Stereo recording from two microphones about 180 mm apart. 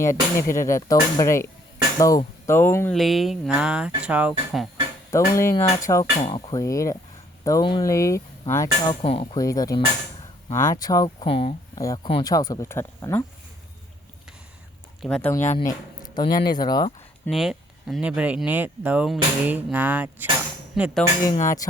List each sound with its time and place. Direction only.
0.0 s speech: 15° left (ahead or behind)
3.0 s speech: centre (ahead or behind)
5.1 s speech: 15° left (ahead or behind)
9.0 s speech: 30° left (ahead or behind)
9.4 s speech: 20° left (ahead or behind)
15.0 s speech: 5° left (ahead or behind)
15.3 s speech: 15° left (ahead or behind)
17.2 s speech: centre (ahead or behind)
21.4 s speech: 20° left (ahead or behind)